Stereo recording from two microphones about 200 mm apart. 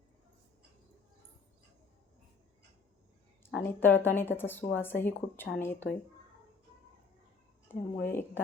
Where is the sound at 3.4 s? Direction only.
10° left (ahead or behind).